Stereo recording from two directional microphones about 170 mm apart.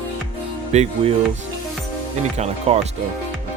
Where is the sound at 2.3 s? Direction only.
40° right (ahead or behind).